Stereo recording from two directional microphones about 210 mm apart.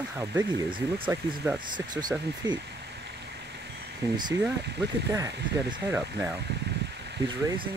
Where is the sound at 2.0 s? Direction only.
20° right (ahead or behind).